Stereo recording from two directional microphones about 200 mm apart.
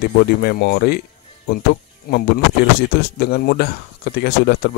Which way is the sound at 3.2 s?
50° left (ahead or behind).